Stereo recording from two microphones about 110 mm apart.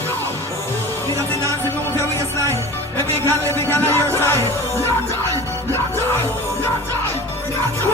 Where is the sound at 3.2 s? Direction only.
20° left (ahead or behind).